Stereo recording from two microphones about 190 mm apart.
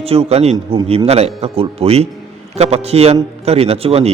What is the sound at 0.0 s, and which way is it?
A man's voice, 30° right (ahead or behind).